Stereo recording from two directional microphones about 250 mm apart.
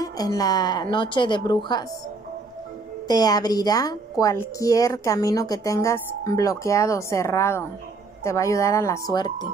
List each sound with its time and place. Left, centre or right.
0.0 s a woman's voice: centre
3.1 s a woman's voice: centre